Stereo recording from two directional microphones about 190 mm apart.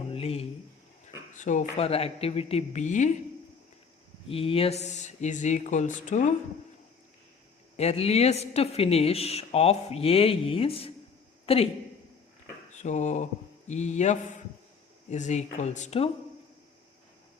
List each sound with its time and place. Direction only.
0.1 s a sound: 30° left (ahead or behind)
1.4 s speech: 40° left (ahead or behind)
4.3 s speech: 30° left (ahead or behind)
7.8 s a man's voice: 35° left (ahead or behind)
12.7 s speech: 40° left (ahead or behind)